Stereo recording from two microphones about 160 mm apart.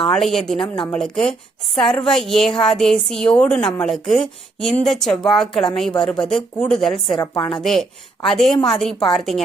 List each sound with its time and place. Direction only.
0.1 s a woman's voice: centre (ahead or behind)
7.2 s a woman's voice: 25° left (ahead or behind)
7.5 s a woman's voice: centre (ahead or behind)